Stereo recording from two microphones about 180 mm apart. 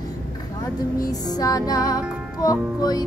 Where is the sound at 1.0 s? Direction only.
20° left (ahead or behind).